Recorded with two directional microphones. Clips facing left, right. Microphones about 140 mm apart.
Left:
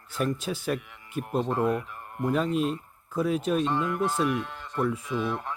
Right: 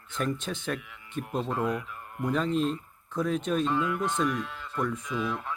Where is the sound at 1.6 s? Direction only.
30° left (ahead or behind).